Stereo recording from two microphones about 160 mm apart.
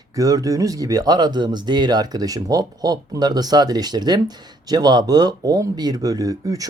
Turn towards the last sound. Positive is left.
turn(degrees=-20)  # may be behind; listen again after turning